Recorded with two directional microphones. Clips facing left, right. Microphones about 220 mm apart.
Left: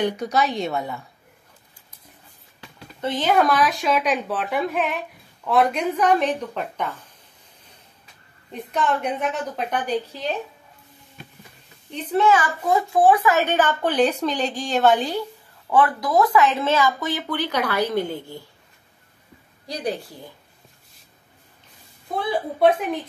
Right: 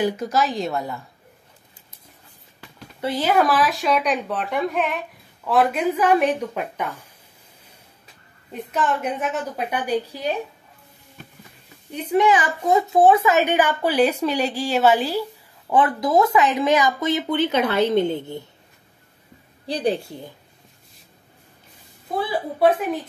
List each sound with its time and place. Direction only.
0.0 s speech: 5° right (ahead or behind)
3.0 s speech: 10° right (ahead or behind)
8.5 s a woman's voice: 5° right (ahead or behind)
11.9 s a woman's voice: 10° right (ahead or behind)
15.7 s speech: 20° right (ahead or behind)
19.6 s speech: 30° right (ahead or behind)